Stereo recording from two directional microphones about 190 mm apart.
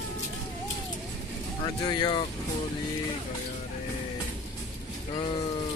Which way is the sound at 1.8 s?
25° left (ahead or behind).